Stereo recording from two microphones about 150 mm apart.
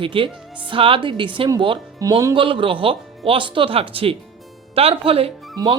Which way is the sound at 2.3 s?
35° right (ahead or behind).